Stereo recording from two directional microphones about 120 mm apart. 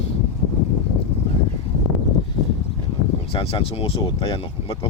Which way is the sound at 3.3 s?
50° left (ahead or behind).